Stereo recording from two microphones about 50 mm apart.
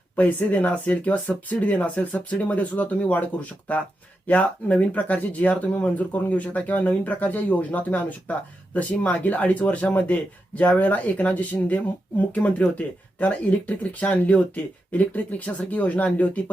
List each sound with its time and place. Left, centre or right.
0.2 s speech: left